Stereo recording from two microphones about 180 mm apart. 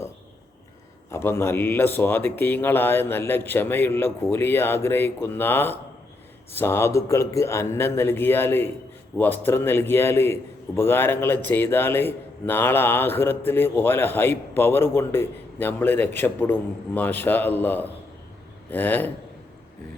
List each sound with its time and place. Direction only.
1.1 s a man's voice: 15° left (ahead or behind)